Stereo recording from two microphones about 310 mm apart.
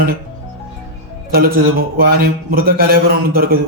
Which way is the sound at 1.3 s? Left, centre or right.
Right.